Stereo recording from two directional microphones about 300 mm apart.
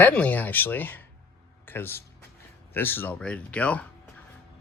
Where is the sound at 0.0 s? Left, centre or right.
Centre.